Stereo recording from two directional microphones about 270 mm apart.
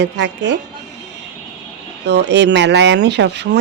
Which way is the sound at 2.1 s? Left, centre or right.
Right.